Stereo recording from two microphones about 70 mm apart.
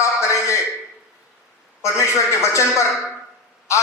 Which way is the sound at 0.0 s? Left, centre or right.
Left.